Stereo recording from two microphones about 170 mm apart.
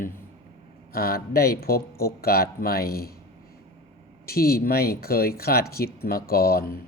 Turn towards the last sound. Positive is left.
turn(degrees=60)  # may be behind; listen again after turning